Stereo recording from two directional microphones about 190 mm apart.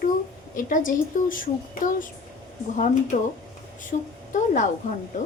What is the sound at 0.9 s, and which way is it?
A woman's voice, 45° left (ahead or behind).